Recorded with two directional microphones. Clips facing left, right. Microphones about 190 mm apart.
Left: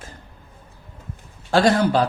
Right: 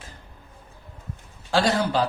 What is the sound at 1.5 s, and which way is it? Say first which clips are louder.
Speech: left 5 dB; 55° left (ahead or behind).